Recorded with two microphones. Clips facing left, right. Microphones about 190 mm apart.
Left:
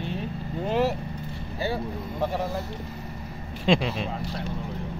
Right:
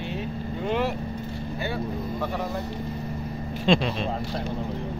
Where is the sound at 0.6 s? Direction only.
35° left (ahead or behind).